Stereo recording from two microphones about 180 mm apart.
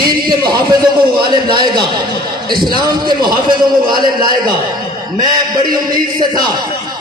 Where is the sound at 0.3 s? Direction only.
25° right (ahead or behind).